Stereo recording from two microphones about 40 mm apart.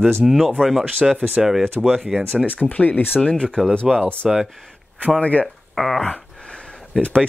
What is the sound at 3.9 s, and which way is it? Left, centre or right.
Speech, centre.